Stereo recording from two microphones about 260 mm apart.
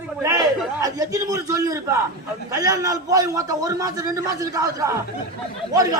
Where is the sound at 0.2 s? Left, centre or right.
Centre.